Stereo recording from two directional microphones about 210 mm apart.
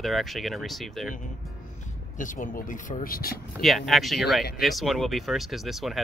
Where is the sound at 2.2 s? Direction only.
40° left (ahead or behind).